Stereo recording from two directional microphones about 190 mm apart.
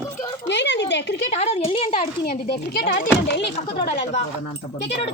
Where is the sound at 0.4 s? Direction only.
70° left (ahead or behind).